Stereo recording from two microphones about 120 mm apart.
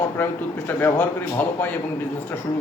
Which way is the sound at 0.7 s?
15° left (ahead or behind).